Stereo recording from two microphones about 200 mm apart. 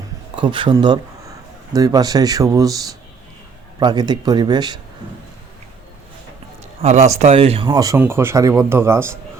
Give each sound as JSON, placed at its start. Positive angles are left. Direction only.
{"t": 0.3, "sound": "speech", "side_deg": -25}
{"t": 3.8, "sound": "speech", "side_deg": -20}
{"t": 6.8, "sound": "a man's voice", "side_deg": -35}